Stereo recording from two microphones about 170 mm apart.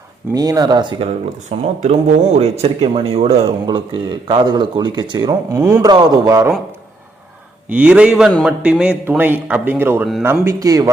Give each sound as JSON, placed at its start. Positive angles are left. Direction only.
{"t": 0.3, "sound": "a man's voice", "side_deg": -20}
{"t": 1.5, "sound": "a man's voice", "side_deg": -40}
{"t": 7.7, "sound": "a man's voice", "side_deg": -5}